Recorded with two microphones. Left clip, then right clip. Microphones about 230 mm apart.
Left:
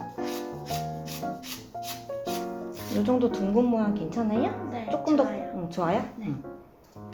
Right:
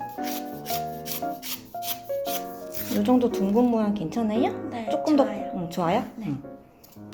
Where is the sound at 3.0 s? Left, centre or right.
Right.